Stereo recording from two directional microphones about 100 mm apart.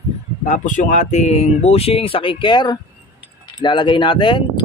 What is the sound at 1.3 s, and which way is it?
Speech, 90° left.